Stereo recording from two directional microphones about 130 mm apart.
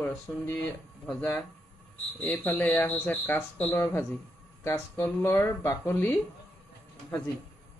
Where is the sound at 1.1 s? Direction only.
Centre (ahead or behind); by 6.2 s 20° left (ahead or behind).